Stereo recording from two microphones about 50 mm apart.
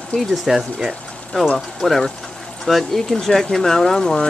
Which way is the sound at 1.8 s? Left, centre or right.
Centre.